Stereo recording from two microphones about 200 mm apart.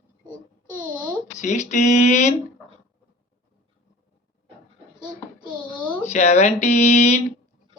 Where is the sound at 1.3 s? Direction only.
35° left (ahead or behind).